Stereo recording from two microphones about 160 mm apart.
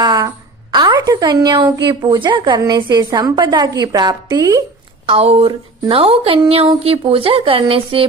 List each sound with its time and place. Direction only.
0.0 s a woman's voice: 25° right (ahead or behind)
5.0 s speech: 40° right (ahead or behind)